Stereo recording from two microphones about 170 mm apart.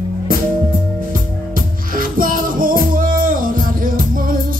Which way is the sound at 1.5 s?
55° right (ahead or behind).